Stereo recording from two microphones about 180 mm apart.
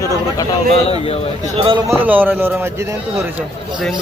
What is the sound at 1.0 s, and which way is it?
Speech, 35° left (ahead or behind).